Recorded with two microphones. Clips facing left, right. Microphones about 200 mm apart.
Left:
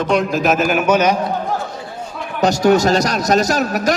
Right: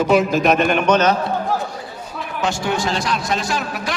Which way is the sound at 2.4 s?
40° left (ahead or behind).